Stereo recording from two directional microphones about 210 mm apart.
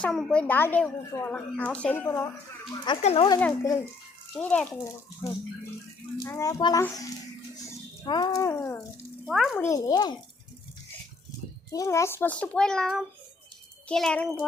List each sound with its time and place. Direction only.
0.0 s a woman's voice: 5° left (ahead or behind)
2.8 s a child's voice: 25° left (ahead or behind)
3.4 s a woman's voice: 15° left (ahead or behind)
6.2 s a woman's voice: 15° left (ahead or behind)
9.2 s a child's voice: centre (ahead or behind)
9.6 s a child's voice: 15° left (ahead or behind)
11.7 s a woman's voice: 15° left (ahead or behind)